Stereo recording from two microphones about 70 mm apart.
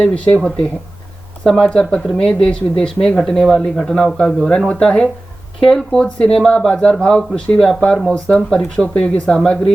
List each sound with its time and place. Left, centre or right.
0.0 s speech: centre
1.5 s speech: centre